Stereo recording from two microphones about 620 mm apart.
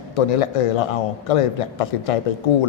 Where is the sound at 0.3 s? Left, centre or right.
Left.